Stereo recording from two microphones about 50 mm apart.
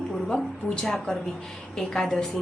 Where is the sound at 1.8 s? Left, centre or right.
Centre.